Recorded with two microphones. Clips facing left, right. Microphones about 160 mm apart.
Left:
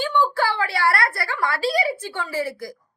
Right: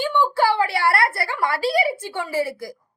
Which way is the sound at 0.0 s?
20° right (ahead or behind).